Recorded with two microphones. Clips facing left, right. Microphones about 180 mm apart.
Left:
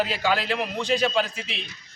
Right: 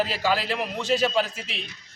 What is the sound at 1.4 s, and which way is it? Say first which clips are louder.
Speech: left 1 dB; 40° right (ahead or behind).